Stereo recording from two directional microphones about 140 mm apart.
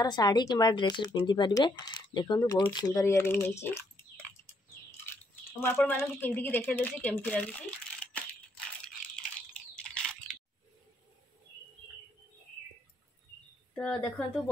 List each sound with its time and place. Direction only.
0.0 s speech: 30° left (ahead or behind)
3.6 s a sound: 15° left (ahead or behind)
5.9 s speech: 15° left (ahead or behind)
8.0 s crushing: 10° left (ahead or behind)
13.7 s speech: 5° left (ahead or behind)